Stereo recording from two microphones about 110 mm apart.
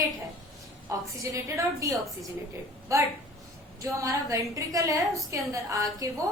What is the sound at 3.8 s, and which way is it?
A woman's voice, 30° right (ahead or behind).